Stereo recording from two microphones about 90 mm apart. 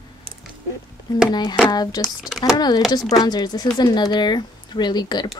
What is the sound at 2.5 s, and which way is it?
Speech, 50° left (ahead or behind).